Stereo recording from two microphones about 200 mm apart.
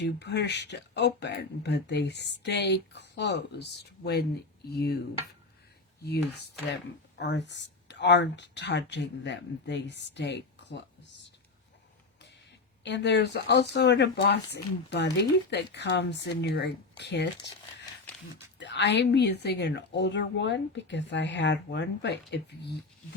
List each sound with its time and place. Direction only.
0.0 s speech: 55° left (ahead or behind)
7.2 s speech: 60° left (ahead or behind)
12.8 s speech: 60° left (ahead or behind)
18.6 s speech: 60° left (ahead or behind)